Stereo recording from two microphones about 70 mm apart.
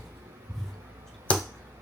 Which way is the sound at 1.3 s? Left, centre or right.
Centre.